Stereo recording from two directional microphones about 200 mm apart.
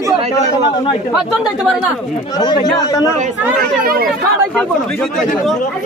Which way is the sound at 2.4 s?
20° left (ahead or behind).